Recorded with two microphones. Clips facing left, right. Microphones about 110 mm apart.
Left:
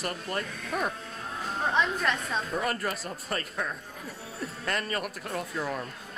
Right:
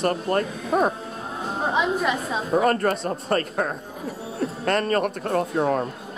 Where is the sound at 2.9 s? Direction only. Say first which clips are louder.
Right 10 dB; 35° right (ahead or behind).